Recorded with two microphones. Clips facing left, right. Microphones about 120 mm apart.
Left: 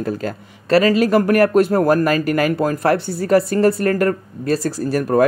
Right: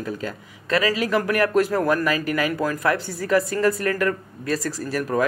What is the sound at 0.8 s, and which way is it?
Speech, 55° left (ahead or behind).